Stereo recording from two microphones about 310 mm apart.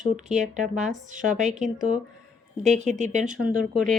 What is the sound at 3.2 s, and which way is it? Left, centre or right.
Speech, centre.